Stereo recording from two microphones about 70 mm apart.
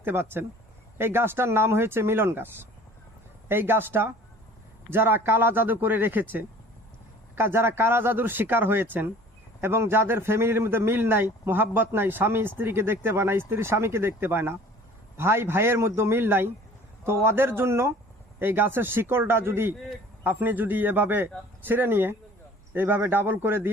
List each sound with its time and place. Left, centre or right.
0.0 s a man's voice: right
3.5 s a man's voice: right